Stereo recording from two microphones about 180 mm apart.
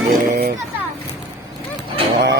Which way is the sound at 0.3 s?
55° right (ahead or behind).